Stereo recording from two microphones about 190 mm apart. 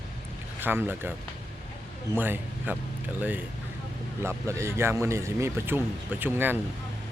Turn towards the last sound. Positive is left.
turn(degrees=-10)  # may be behind; listen again after turning